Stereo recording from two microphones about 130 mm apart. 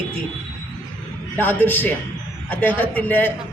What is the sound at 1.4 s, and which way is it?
A woman's voice, 15° left (ahead or behind).